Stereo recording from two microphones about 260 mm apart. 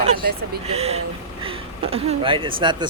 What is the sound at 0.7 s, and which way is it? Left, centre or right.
Speech, right.